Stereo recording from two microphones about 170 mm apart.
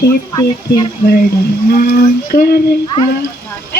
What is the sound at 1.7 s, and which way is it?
Speech, 65° left (ahead or behind).